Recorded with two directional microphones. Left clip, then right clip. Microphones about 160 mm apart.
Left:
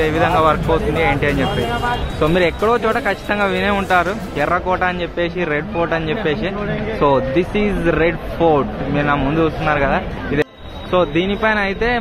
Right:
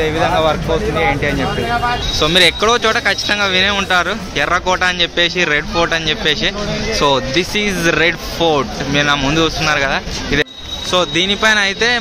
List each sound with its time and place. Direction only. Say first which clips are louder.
0.0 s speech: even; centre (ahead or behind)
2.1 s speech: right 5 dB; 15° right (ahead or behind)
3.3 s speech: right 3 dB; centre (ahead or behind)